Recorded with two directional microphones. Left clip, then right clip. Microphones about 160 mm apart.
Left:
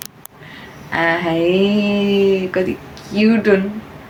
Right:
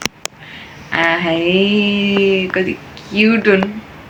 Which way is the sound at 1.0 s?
5° right (ahead or behind).